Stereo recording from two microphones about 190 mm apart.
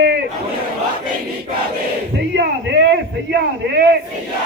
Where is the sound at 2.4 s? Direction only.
60° right (ahead or behind).